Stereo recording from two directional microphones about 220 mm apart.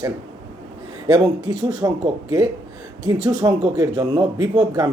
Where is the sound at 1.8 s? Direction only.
15° right (ahead or behind).